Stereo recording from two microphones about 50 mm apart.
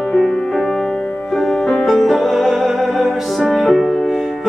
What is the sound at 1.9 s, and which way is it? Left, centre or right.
Music, centre.